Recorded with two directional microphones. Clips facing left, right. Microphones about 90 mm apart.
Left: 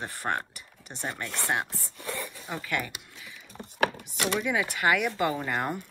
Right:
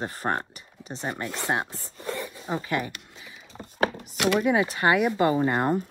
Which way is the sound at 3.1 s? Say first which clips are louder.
Right 1 dB; 25° right (ahead or behind).